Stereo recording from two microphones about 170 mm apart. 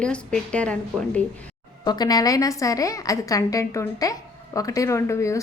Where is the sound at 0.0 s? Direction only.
5° left (ahead or behind).